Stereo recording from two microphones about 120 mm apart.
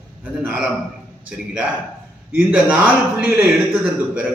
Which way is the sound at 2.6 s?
10° right (ahead or behind).